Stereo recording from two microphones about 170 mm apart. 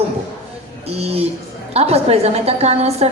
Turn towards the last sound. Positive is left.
turn(degrees=-40)  # may be behind; listen again after turning